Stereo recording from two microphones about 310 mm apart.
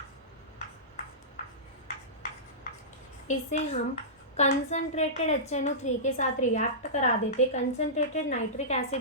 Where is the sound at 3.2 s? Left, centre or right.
Left.